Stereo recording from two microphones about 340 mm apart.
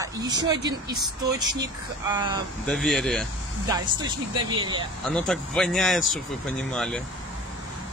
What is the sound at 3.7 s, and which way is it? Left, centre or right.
Speech, centre.